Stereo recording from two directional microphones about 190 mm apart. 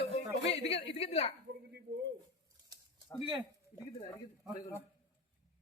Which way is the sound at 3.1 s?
10° left (ahead or behind).